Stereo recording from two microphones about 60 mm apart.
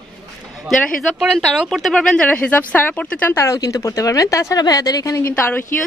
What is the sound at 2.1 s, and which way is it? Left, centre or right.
Speech, centre.